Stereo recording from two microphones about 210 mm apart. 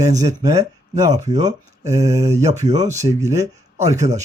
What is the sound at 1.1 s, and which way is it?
Speech, 30° right (ahead or behind).